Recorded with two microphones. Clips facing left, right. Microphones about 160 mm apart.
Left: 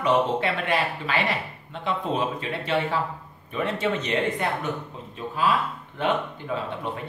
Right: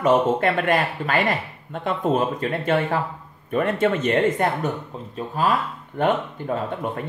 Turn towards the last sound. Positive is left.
turn(degrees=-50)  # may be behind; listen again after turning